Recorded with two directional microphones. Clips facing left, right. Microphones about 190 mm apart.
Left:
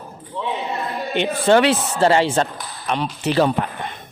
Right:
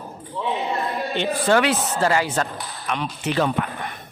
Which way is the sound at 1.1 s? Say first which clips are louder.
Left 5 dB; 20° left (ahead or behind).